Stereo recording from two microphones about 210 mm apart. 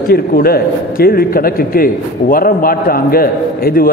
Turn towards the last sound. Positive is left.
turn(degrees=45)  # may be behind; listen again after turning